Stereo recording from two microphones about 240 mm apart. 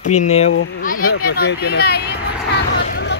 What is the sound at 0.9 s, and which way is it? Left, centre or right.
Speech, left.